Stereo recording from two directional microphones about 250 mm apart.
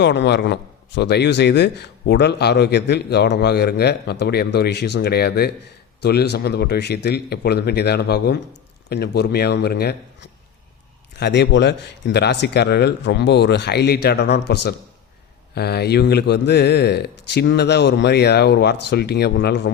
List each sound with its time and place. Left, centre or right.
0.0 s speech: left